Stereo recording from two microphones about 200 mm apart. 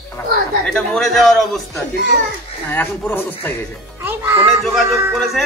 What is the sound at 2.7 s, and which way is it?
Speech, 10° left (ahead or behind).